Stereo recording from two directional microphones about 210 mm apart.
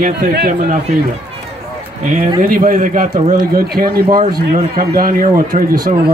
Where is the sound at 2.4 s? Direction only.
40° right (ahead or behind).